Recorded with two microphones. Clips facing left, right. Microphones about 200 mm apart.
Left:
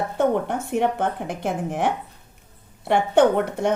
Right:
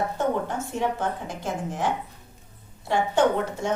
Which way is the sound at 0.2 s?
60° left (ahead or behind).